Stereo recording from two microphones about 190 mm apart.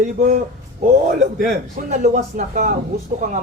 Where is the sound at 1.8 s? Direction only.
40° right (ahead or behind).